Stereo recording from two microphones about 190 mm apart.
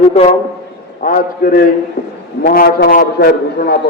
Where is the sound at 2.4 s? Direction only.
60° left (ahead or behind).